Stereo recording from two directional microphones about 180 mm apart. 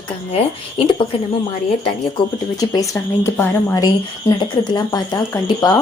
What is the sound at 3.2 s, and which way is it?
Speech, 15° left (ahead or behind).